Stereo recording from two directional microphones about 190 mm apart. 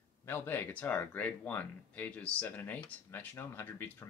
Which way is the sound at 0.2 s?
10° left (ahead or behind).